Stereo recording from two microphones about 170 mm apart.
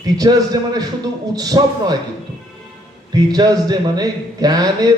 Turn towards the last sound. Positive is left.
turn(degrees=-20)  # may be behind; listen again after turning